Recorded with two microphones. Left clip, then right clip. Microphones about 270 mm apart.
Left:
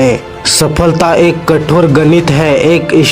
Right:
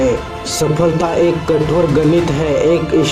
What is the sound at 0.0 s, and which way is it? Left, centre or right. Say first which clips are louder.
Speech: left 5 dB; left.